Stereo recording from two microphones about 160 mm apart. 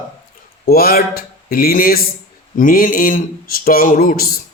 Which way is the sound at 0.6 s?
70° left (ahead or behind).